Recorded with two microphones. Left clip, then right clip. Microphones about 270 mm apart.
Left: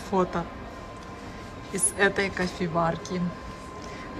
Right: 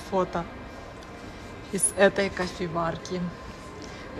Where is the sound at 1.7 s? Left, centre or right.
Centre.